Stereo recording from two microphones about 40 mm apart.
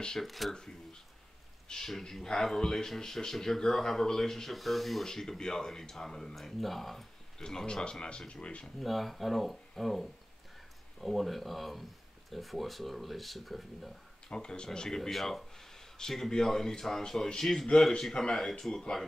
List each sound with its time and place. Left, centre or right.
0.2 s speech: centre
0.6 s a sound: centre
1.7 s speech: centre
7.4 s speech: centre
8.7 s speech: centre
14.3 s speech: left
15.0 s speech: centre